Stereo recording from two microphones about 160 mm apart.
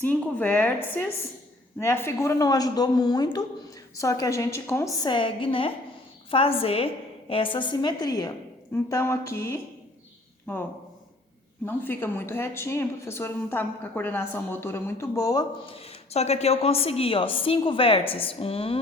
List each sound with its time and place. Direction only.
0.0 s a woman's voice: 10° left (ahead or behind)
1.8 s a woman's voice: 15° left (ahead or behind)
15.7 s a woman's voice: 40° left (ahead or behind)